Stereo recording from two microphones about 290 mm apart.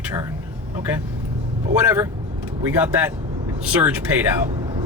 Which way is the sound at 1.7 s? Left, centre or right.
Centre.